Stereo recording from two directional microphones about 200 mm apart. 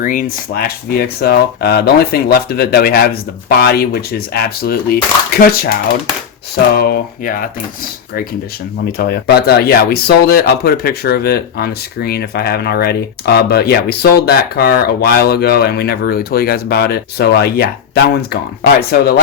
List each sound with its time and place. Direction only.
0.0 s speech: 40° left (ahead or behind)
6.7 s speech: 50° left (ahead or behind)
8.8 s speech: 50° left (ahead or behind)